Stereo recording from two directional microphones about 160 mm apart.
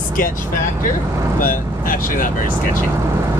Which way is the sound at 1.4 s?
60° left (ahead or behind).